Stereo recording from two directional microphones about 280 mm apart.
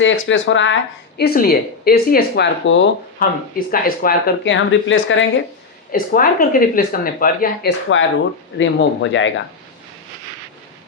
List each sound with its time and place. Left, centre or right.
0.0 s speech: left
5.9 s speech: left